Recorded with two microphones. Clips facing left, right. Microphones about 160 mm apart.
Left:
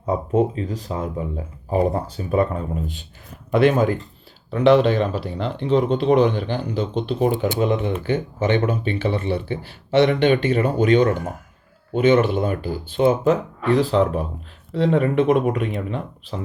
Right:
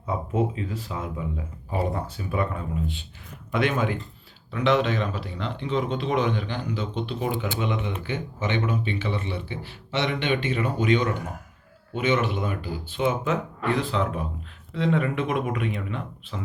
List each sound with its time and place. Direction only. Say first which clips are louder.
0.0 s speech: left 6 dB; 40° left (ahead or behind)